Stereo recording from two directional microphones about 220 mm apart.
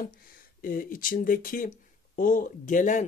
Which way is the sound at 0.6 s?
40° left (ahead or behind).